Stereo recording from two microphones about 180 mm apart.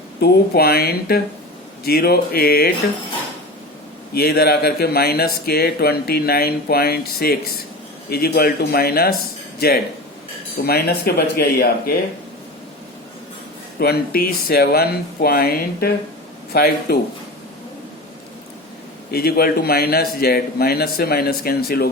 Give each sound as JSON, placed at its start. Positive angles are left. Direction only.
{"t": 0.2, "sound": "speech", "side_deg": 60}
{"t": 4.1, "sound": "speech", "side_deg": 60}
{"t": 13.7, "sound": "speech", "side_deg": 60}
{"t": 19.1, "sound": "speech", "side_deg": 60}